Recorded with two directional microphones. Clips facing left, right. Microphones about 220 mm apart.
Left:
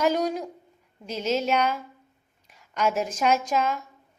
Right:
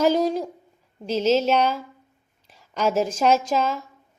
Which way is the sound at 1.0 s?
30° right (ahead or behind).